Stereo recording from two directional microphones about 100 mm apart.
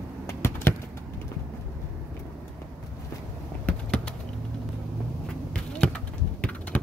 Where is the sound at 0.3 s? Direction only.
25° left (ahead or behind).